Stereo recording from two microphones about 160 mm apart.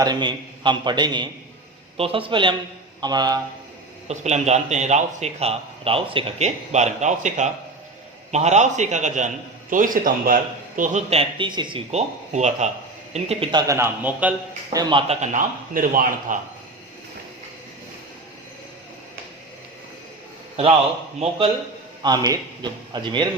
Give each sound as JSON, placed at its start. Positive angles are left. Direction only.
{"t": 0.0, "sound": "a man's voice", "side_deg": -25}
{"t": 4.1, "sound": "a man's voice", "side_deg": -45}
{"t": 11.9, "sound": "a man's voice", "side_deg": -45}
{"t": 14.7, "sound": "a man's voice", "side_deg": -25}
{"t": 21.2, "sound": "a man's voice", "side_deg": -35}
{"t": 22.0, "sound": "a man's voice", "side_deg": -25}